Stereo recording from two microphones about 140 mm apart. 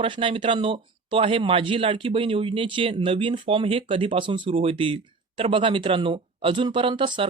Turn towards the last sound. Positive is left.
turn(degrees=-35)  # may be behind; listen again after turning